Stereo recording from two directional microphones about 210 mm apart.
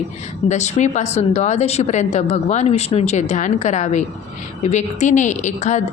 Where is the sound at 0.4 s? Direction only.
35° left (ahead or behind).